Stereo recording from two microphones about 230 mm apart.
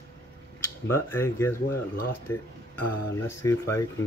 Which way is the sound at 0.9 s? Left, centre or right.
Centre.